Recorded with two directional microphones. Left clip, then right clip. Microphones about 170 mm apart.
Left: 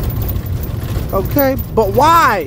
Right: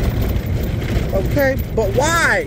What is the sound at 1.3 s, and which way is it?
Speech, 40° left (ahead or behind).